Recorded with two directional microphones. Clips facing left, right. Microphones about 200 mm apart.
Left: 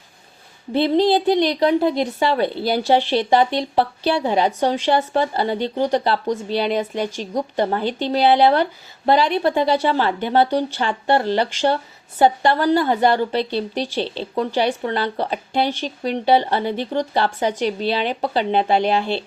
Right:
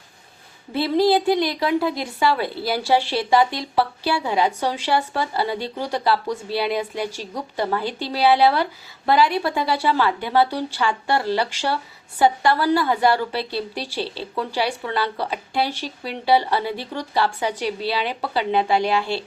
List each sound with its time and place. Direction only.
0.7 s speech: 20° left (ahead or behind)